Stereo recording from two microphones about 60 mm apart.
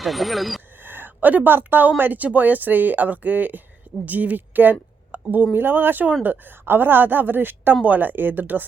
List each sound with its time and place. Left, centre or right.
0.0 s speech: centre
0.8 s a sound: right
2.0 s a woman's voice: right